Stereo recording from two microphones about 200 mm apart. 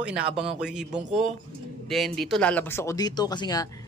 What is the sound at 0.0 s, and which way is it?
Speech, 5° right (ahead or behind).